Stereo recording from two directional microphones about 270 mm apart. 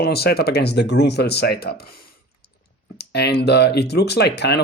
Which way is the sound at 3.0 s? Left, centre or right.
Left.